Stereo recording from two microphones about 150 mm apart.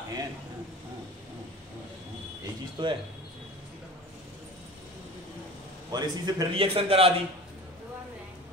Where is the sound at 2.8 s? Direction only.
30° right (ahead or behind).